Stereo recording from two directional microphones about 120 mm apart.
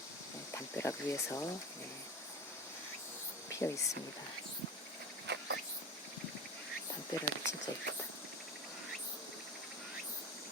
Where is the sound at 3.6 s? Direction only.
15° left (ahead or behind).